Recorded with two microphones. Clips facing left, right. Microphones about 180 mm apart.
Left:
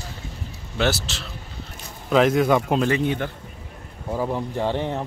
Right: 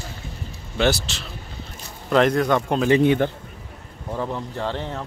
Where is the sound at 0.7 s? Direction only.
5° left (ahead or behind).